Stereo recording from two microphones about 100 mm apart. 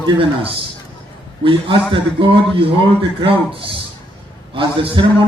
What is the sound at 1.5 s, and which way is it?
Speech, 60° right (ahead or behind).